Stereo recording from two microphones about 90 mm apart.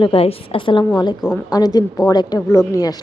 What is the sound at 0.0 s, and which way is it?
Speech, 85° left.